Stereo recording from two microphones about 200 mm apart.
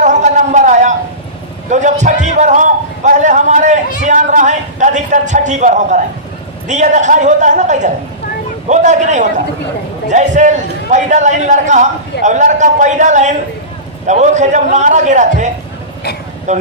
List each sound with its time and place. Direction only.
0.0 s a sound: 35° right (ahead or behind)
1.7 s a man's voice: 35° right (ahead or behind)
16.5 s speech: 35° right (ahead or behind)